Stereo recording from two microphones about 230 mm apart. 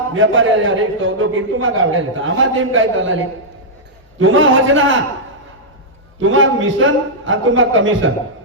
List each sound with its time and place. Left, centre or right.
0.1 s a man's voice: right
6.1 s a man's voice: right